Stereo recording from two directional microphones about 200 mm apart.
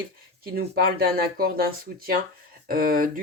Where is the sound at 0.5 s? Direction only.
50° right (ahead or behind).